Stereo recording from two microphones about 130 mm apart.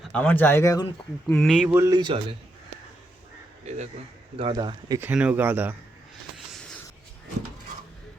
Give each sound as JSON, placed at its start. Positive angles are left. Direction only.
{"t": 0.0, "sound": "speech", "side_deg": 10}
{"t": 1.3, "sound": "speech", "side_deg": 5}
{"t": 1.7, "sound": "speech", "side_deg": -20}
{"t": 2.0, "sound": "speech", "side_deg": -35}
{"t": 4.4, "sound": "speech", "side_deg": -40}
{"t": 5.1, "sound": "speech", "side_deg": -10}